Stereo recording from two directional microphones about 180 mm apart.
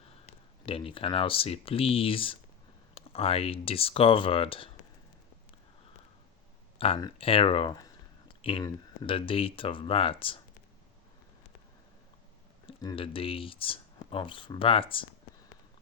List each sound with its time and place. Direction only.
0.6 s speech: 30° left (ahead or behind)
6.7 s speech: 30° left (ahead or behind)
12.6 s speech: 25° left (ahead or behind)